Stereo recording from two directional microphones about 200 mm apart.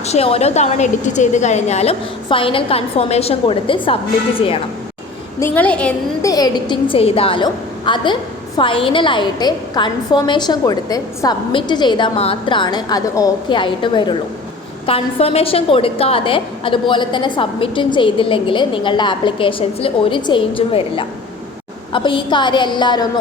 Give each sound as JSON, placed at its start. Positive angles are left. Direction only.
{"t": 0.0, "sound": "a woman's voice", "side_deg": 30}
{"t": 5.4, "sound": "a woman's voice", "side_deg": 5}
{"t": 6.3, "sound": "a woman's voice", "side_deg": 20}